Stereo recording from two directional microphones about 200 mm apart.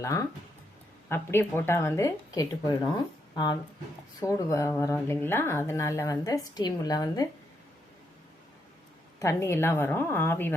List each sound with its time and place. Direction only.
0.0 s speech: 15° left (ahead or behind)
4.2 s speech: 15° left (ahead or behind)
9.1 s speech: 15° left (ahead or behind)